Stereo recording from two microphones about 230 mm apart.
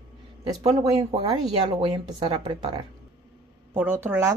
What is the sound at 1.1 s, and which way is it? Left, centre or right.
Speech, right.